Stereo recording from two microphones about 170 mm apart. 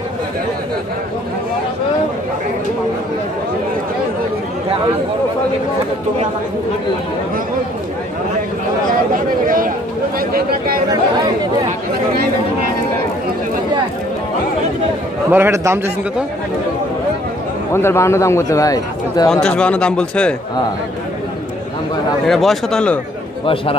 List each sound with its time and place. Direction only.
10.1 s a sound: 60° right (ahead or behind)
15.3 s a man's voice: 15° right (ahead or behind)
17.7 s a man's voice: 15° left (ahead or behind)
19.4 s a man's voice: 5° left (ahead or behind)
22.2 s speech: centre (ahead or behind)
23.4 s speech: 30° left (ahead or behind)